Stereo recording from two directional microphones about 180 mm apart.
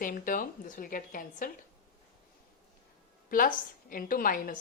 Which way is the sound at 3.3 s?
50° left (ahead or behind).